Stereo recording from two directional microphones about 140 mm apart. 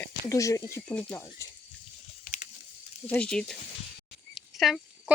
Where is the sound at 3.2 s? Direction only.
5° left (ahead or behind).